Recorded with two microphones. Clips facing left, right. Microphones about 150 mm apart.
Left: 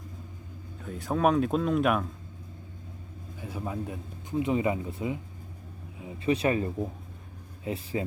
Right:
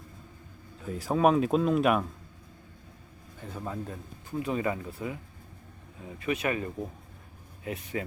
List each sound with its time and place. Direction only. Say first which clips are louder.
0.9 s speech: right 1 dB; centre (ahead or behind)
3.4 s a man's voice: left 2 dB; 10° left (ahead or behind)
6.2 s a man's voice: left 4 dB; 30° left (ahead or behind)